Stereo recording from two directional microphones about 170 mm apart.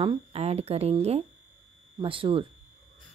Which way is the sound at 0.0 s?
35° right (ahead or behind).